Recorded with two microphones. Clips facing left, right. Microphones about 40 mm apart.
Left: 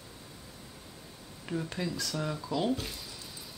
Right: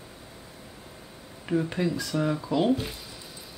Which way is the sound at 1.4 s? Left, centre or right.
Right.